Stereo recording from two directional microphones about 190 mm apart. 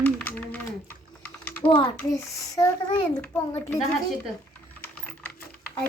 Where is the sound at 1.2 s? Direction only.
10° left (ahead or behind).